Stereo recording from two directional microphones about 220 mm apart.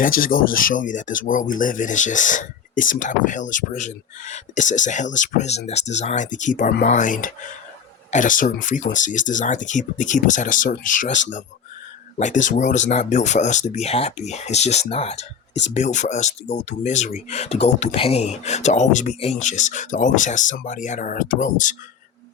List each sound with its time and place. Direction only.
0.0 s speech: 40° left (ahead or behind)